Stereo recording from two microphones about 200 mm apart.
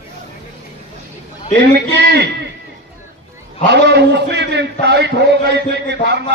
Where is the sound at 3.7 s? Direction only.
60° right (ahead or behind).